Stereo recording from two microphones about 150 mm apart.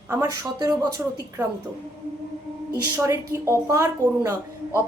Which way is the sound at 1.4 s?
10° right (ahead or behind).